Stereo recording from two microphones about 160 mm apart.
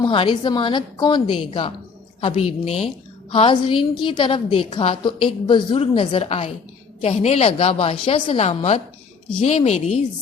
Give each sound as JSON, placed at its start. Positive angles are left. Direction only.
{"t": 0.0, "sound": "a woman's voice", "side_deg": 30}